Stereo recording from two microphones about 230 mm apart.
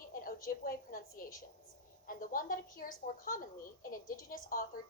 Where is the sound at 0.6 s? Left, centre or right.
Left.